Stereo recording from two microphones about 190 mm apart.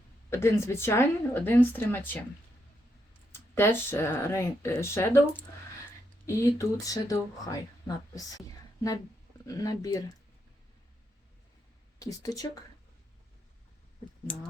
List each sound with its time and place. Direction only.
0.3 s speech: 15° left (ahead or behind)
3.3 s speech: 10° left (ahead or behind)
11.9 s speech: 20° left (ahead or behind)